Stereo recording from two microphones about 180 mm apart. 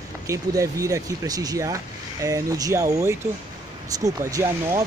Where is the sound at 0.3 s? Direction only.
20° right (ahead or behind).